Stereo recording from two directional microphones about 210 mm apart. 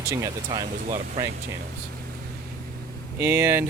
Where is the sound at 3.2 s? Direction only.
10° right (ahead or behind).